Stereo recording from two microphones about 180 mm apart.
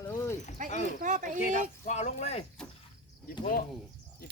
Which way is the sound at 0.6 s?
45° right (ahead or behind).